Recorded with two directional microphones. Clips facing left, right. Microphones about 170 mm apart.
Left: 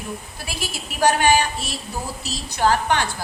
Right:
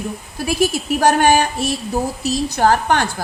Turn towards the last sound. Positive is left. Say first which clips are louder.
# right 4 dB
turn(degrees=-45)  # may be behind; listen again after turning